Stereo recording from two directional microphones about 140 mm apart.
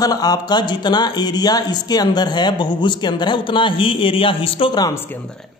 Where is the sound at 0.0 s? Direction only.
25° left (ahead or behind).